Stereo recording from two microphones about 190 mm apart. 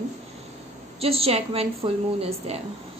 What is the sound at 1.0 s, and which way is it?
Speech, 30° right (ahead or behind).